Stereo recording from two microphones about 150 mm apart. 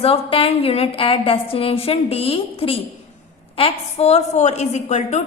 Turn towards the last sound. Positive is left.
turn(degrees=50)  # may be behind; listen again after turning